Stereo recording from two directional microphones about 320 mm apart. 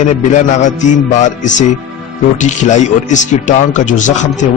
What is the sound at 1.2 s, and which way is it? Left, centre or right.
Speech, left.